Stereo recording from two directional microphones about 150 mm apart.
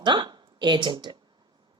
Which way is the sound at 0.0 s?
30° right (ahead or behind).